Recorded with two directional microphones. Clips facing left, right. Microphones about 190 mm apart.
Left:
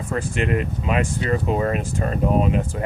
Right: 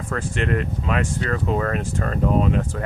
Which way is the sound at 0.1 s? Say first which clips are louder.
Left 1 dB; 15° left (ahead or behind).